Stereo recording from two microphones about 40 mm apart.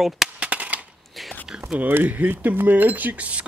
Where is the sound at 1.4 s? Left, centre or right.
Right.